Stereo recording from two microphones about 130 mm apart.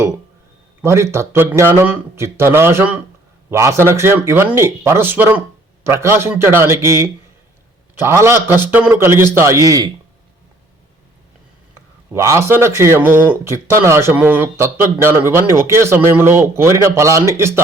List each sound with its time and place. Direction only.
0.8 s speech: 20° right (ahead or behind)
12.1 s speech: 20° right (ahead or behind)